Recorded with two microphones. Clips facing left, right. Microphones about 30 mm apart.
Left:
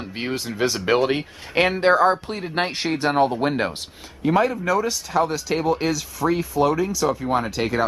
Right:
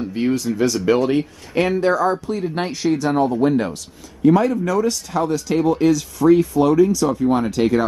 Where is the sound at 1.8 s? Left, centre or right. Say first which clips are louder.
Left 1 dB; left.